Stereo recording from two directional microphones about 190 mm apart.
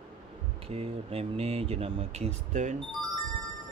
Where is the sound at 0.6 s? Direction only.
30° right (ahead or behind).